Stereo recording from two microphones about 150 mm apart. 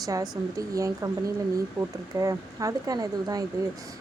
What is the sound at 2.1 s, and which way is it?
A woman's voice, 20° right (ahead or behind).